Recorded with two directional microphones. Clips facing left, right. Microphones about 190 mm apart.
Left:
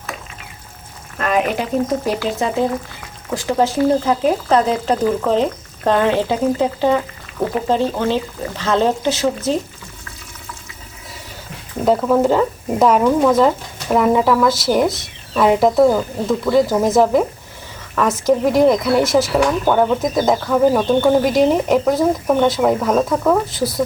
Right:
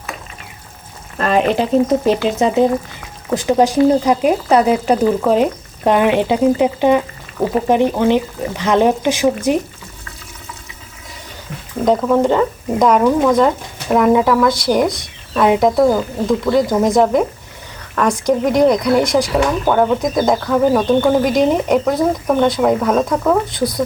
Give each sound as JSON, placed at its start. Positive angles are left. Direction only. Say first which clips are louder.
{"t": 1.2, "sound": "frying", "louder": "right 3 dB", "side_deg": -30}
{"t": 2.0, "sound": "speech", "louder": "right 5 dB", "side_deg": -20}
{"t": 3.3, "sound": "speech", "louder": "right 4 dB", "side_deg": -15}
{"t": 11.9, "sound": "speech", "louder": "right 1 dB", "side_deg": 5}